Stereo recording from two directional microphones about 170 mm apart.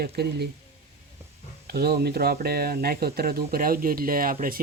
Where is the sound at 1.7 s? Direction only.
65° right (ahead or behind).